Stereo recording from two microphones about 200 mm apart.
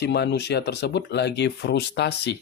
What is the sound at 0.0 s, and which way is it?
Speech, 55° left (ahead or behind).